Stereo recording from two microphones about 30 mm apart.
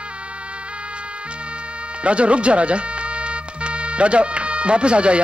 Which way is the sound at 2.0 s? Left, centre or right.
Right.